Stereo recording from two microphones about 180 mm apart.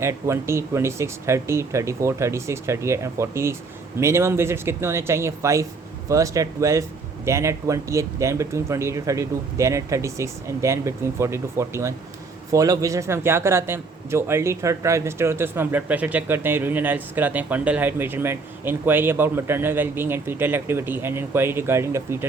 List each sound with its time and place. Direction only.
0.0 s a man's voice: 15° right (ahead or behind)